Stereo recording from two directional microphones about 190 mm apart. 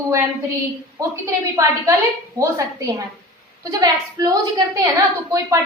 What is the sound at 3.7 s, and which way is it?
Speech, 20° right (ahead or behind).